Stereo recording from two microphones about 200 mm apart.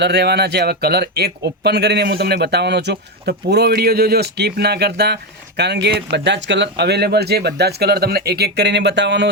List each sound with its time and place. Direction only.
0.0 s speech: 55° right (ahead or behind)